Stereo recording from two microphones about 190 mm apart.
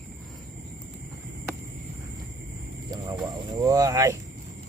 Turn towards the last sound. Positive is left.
turn(degrees=-15)  # may be behind; listen again after turning